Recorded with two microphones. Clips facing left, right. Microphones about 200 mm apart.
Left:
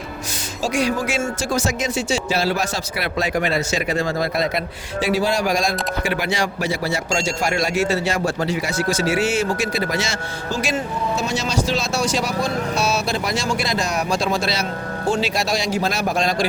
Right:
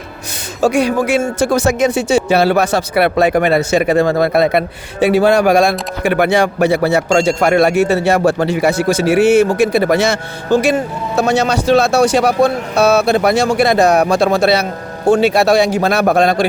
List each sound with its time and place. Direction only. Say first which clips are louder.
0.6 s speech: right 8 dB; 60° right (ahead or behind)